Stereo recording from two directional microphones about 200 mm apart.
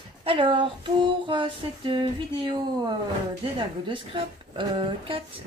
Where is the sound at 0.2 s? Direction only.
25° right (ahead or behind).